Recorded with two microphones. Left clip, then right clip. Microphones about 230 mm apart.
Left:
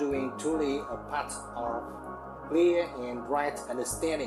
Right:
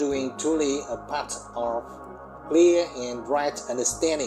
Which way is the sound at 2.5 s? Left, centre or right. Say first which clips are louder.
Right 6 dB; centre.